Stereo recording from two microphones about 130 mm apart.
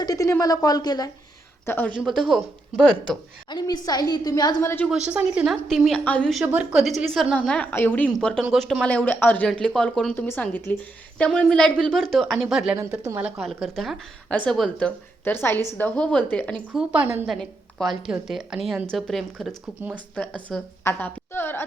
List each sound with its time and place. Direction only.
0.0 s speech: 25° left (ahead or behind)
1.6 s speech: 15° left (ahead or behind)
2.0 s a woman's voice: centre (ahead or behind)
3.5 s a woman's voice: 30° left (ahead or behind)
4.6 s a woman's voice: 15° left (ahead or behind)
4.9 s speech: 10° right (ahead or behind)
5.6 s a woman's voice: centre (ahead or behind)
6.4 s a woman's voice: 10° right (ahead or behind); by 10.2 s 5° left (ahead or behind)
10.2 s a woman's voice: 15° left (ahead or behind)
15.3 s a woman's voice: 15° left (ahead or behind)
16.7 s speech: 10° right (ahead or behind)
17.2 s a woman's voice: centre (ahead or behind)
20.8 s a sound: 15° left (ahead or behind)